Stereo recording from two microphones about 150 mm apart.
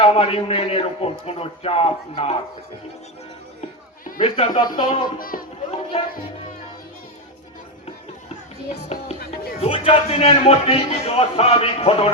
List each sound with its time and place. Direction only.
0.0 s a man's voice: 40° left (ahead or behind)
4.2 s a man's voice: 35° left (ahead or behind)
5.2 s speech: 75° left (ahead or behind)
5.9 s a man's voice: 40° left (ahead or behind)
8.7 s music: 45° left (ahead or behind)
9.6 s a man's voice: 35° left (ahead or behind)